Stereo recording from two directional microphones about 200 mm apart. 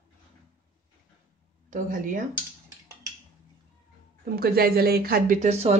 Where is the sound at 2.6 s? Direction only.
15° right (ahead or behind).